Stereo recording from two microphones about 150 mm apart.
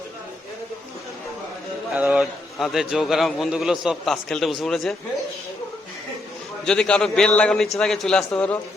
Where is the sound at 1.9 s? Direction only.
5° right (ahead or behind).